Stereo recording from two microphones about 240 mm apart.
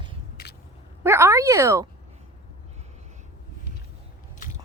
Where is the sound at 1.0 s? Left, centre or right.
Centre.